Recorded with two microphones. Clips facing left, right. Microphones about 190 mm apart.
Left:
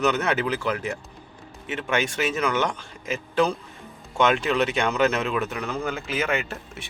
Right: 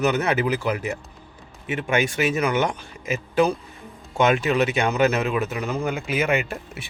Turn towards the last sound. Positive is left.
turn(degrees=-10)  # may be behind; listen again after turning